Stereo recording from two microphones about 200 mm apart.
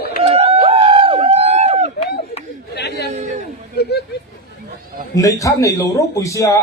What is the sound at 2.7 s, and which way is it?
Chatter, 55° left (ahead or behind).